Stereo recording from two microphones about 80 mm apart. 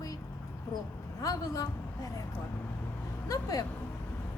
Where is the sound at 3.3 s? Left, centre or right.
Left.